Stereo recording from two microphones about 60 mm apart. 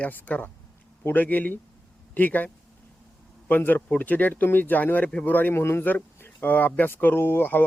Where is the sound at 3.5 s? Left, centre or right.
Left.